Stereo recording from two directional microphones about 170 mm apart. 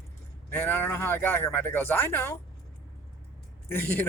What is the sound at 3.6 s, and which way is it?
Speech, 10° left (ahead or behind).